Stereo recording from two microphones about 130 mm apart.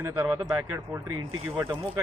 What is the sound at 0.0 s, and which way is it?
Speech, 25° right (ahead or behind).